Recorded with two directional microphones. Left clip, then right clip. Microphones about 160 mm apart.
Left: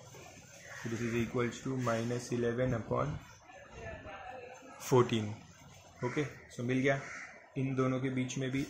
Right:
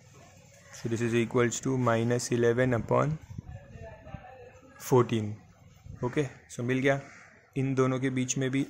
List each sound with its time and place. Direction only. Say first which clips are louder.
1.1 s speech: right 9 dB; 70° right (ahead or behind)
4.7 s a man's voice: right 4 dB; 45° right (ahead or behind)
7.5 s speech: right 6 dB; 70° right (ahead or behind)